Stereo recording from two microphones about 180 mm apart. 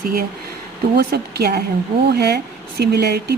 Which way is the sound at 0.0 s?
55° right (ahead or behind).